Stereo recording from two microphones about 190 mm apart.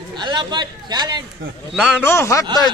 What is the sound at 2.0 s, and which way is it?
Speech, 15° left (ahead or behind).